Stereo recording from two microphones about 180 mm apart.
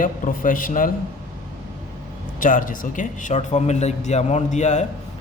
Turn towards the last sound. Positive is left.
turn(degrees=40)  # may be behind; listen again after turning